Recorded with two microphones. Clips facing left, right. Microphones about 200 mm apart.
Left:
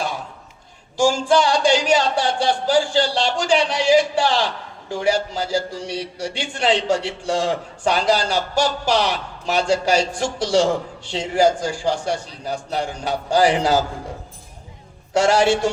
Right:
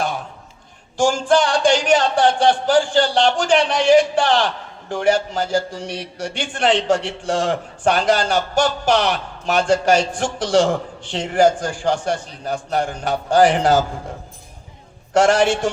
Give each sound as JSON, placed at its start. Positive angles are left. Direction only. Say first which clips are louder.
{"t": 0.9, "sound": "a sound", "louder": "even", "side_deg": -50}
{"t": 1.3, "sound": "a man's voice", "louder": "right 2 dB", "side_deg": -50}
{"t": 15.1, "sound": "a man's voice", "louder": "right 1 dB", "side_deg": -55}